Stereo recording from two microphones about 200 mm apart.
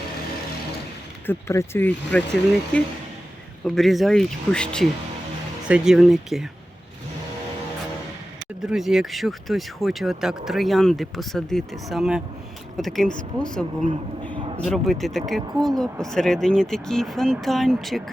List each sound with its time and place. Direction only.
1.3 s speech: 10° left (ahead or behind)
8.6 s speech: centre (ahead or behind)
14.3 s a sound: 25° right (ahead or behind)
14.6 s speech: centre (ahead or behind)